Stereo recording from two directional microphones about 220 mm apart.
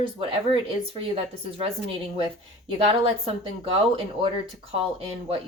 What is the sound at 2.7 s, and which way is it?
Speech, 25° right (ahead or behind).